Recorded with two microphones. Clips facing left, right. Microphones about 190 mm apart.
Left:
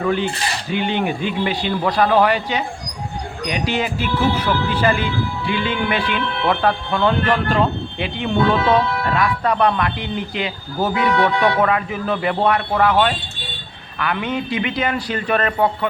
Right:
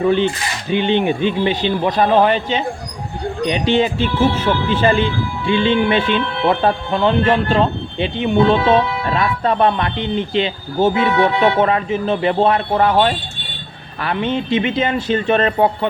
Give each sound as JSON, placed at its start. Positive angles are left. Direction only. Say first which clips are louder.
{"t": 0.0, "sound": "speech", "louder": "right 4 dB", "side_deg": -25}